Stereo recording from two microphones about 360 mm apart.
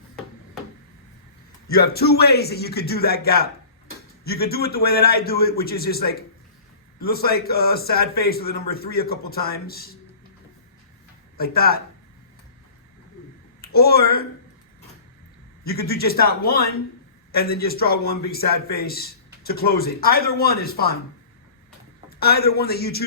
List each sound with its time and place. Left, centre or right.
1.7 s a man's voice: left
11.3 s a man's voice: left
13.6 s speech: left
15.6 s a man's voice: left
22.2 s a man's voice: left